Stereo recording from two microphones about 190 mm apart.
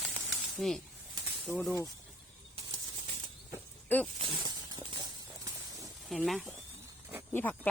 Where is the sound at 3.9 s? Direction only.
10° left (ahead or behind).